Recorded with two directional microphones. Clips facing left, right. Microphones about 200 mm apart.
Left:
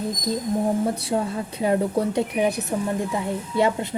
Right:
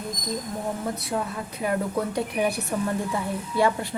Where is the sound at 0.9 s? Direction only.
30° left (ahead or behind).